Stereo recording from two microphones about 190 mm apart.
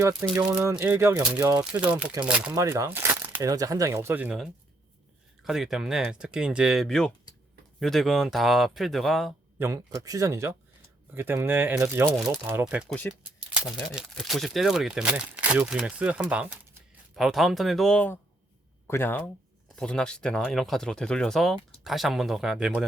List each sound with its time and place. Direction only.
0.3 s speech: 15° right (ahead or behind)
2.6 s speech: 15° right (ahead or behind); by 9.3 s centre (ahead or behind)
9.6 s speech: 15° right (ahead or behind)
12.1 s speech: centre (ahead or behind)
12.9 s speech: 10° left (ahead or behind)